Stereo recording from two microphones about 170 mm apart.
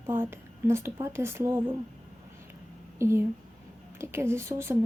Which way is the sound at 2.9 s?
15° right (ahead or behind).